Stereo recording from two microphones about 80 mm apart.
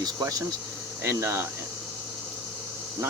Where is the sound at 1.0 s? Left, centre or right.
Right.